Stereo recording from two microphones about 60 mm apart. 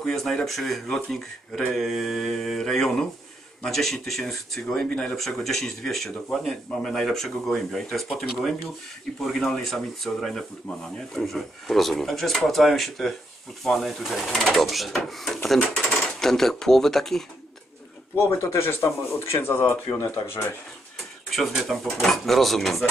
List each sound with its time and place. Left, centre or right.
0.0 s speech: centre
1.7 s mantra: centre
3.6 s speech: centre
9.4 s speech: centre
18.1 s speech: left
21.7 s speech: centre